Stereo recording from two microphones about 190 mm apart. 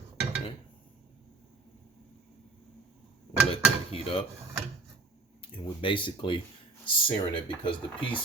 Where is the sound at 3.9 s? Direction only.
30° left (ahead or behind).